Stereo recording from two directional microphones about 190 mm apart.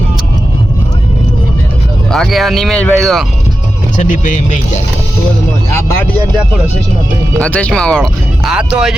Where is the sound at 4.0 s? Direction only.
40° left (ahead or behind).